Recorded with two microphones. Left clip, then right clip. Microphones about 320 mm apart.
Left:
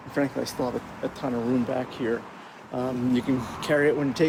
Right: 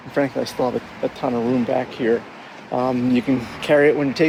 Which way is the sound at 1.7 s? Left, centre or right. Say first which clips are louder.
Right 8 dB; right.